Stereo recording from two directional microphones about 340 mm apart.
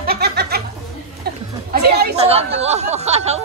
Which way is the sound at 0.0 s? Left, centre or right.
Right.